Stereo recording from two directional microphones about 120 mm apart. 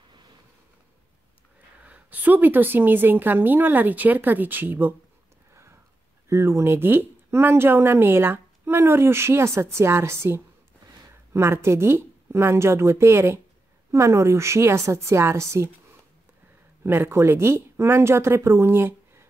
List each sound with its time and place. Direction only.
1.9 s a woman's voice: 15° right (ahead or behind)
5.5 s a sound: 25° right (ahead or behind)
6.2 s speech: 25° right (ahead or behind)
16.8 s speech: 20° right (ahead or behind)